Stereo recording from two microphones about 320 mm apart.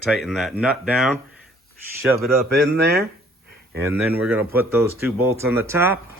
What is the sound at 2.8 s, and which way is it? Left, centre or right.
Speech, right.